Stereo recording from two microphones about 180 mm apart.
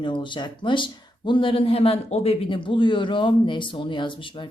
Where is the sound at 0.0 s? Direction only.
25° left (ahead or behind).